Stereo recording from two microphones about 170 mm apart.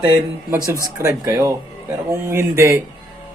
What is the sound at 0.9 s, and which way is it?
Mantra, 15° right (ahead or behind).